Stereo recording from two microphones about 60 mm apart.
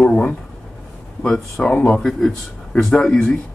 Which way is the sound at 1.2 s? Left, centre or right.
Centre.